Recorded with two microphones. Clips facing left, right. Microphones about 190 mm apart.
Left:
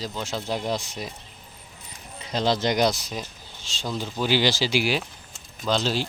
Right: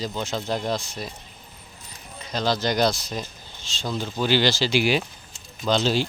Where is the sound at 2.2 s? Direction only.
25° left (ahead or behind); by 6.0 s centre (ahead or behind).